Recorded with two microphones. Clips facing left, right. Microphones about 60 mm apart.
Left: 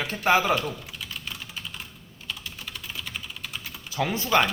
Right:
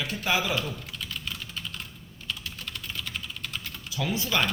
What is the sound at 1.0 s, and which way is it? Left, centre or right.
Typing, centre.